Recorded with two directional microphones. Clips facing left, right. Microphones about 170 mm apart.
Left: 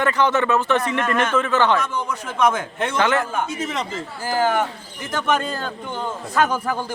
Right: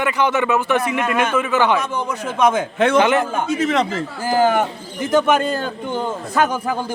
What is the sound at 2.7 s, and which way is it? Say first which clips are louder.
Speech: right 9 dB; 90° right.